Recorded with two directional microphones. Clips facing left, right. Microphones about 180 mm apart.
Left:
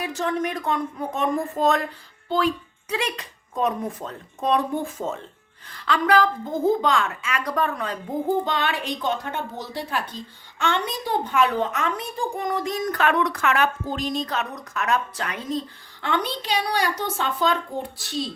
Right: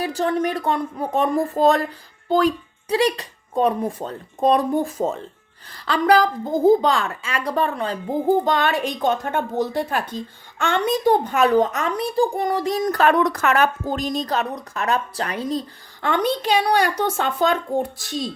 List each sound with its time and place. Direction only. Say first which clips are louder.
0.0 s a child's voice: right 4 dB; 35° right (ahead or behind)
8.4 s a woman's voice: right 5 dB; 45° right (ahead or behind)